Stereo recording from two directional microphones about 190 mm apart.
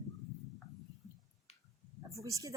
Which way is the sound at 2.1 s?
15° right (ahead or behind).